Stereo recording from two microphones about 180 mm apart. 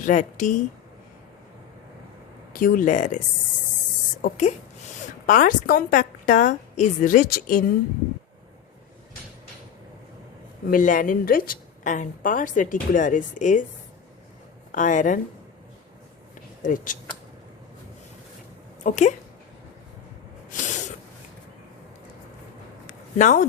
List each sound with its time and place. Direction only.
0.0 s a woman's voice: 45° left (ahead or behind)
2.5 s a woman's voice: 50° left (ahead or behind)
10.7 s a woman's voice: 45° left (ahead or behind)
14.7 s a woman's voice: 45° left (ahead or behind)
16.6 s a woman's voice: 45° left (ahead or behind)
18.8 s a woman's voice: 45° left (ahead or behind)
20.5 s sneeze: 45° left (ahead or behind)
23.1 s a woman's voice: 45° left (ahead or behind)